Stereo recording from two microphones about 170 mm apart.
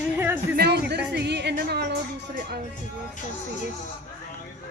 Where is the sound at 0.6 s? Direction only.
75° right (ahead or behind).